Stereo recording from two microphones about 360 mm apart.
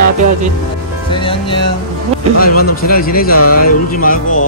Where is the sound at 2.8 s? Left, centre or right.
Left.